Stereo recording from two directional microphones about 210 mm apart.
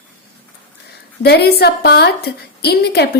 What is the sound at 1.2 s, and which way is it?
A woman's voice, 50° left (ahead or behind).